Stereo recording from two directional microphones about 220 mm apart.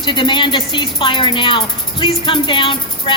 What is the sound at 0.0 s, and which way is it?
A woman's voice, 20° left (ahead or behind).